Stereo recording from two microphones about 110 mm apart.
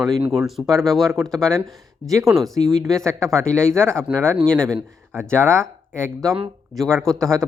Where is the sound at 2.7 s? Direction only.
5° left (ahead or behind).